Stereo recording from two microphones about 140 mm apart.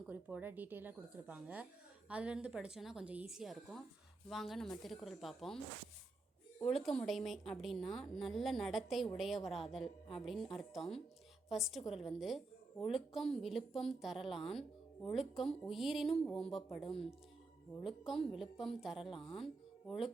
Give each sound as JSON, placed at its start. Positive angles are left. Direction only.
{"t": 0.1, "sound": "a woman's voice", "side_deg": -10}
{"t": 6.7, "sound": "a woman's voice", "side_deg": 5}
{"t": 16.8, "sound": "speech", "side_deg": 45}
{"t": 17.8, "sound": "a woman's voice", "side_deg": 0}
{"t": 19.1, "sound": "a woman's voice", "side_deg": 40}